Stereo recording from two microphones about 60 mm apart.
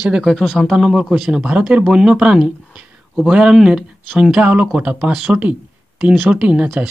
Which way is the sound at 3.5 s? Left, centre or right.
Centre.